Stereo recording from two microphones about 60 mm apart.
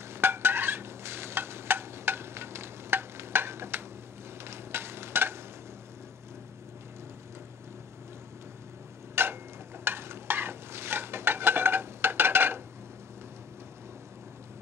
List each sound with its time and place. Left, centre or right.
0.0 s stir: right
9.1 s a sound: right
9.8 s stir: right